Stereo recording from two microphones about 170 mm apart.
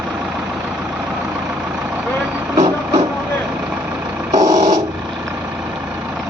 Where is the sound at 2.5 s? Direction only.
25° right (ahead or behind).